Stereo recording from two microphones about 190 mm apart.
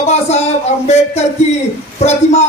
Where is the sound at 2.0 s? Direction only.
35° left (ahead or behind).